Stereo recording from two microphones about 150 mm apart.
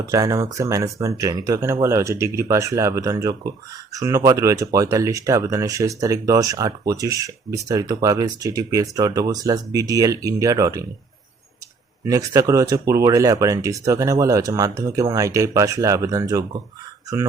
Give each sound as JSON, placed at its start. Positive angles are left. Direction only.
{"t": 0.0, "sound": "speech", "side_deg": -20}
{"t": 12.0, "sound": "speech", "side_deg": -25}